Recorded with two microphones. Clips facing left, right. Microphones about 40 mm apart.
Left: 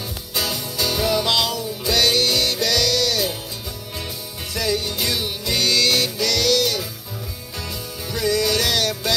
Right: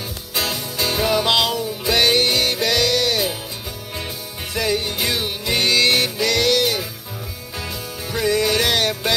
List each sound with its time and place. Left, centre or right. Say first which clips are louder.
0.3 s music: right 2 dB; centre
4.6 s music: right 2 dB; right